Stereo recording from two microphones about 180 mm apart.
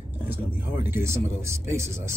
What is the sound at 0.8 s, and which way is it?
Speech, 15° right (ahead or behind).